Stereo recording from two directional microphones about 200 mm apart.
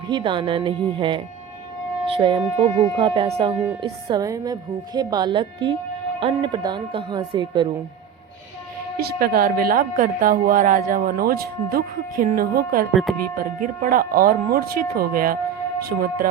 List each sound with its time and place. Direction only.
0.1 s speech: 25° right (ahead or behind)
9.0 s a woman's voice: 50° right (ahead or behind)